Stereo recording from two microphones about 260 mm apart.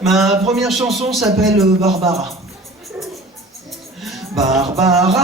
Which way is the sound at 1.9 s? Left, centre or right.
Right.